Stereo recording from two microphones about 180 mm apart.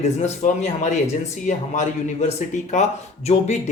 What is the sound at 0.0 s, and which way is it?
Speech, 40° left (ahead or behind).